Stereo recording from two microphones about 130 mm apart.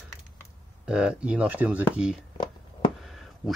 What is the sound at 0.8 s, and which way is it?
Speech, 10° right (ahead or behind).